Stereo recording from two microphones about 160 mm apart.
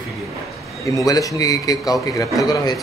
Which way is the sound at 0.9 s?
20° left (ahead or behind).